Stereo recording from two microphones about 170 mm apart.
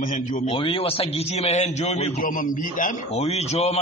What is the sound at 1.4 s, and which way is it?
Speech, 40° left (ahead or behind).